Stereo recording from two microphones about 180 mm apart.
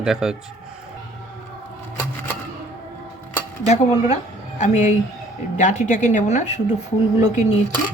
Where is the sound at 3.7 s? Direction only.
40° left (ahead or behind).